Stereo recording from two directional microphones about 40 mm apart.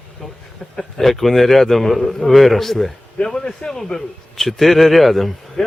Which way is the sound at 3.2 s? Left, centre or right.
Centre.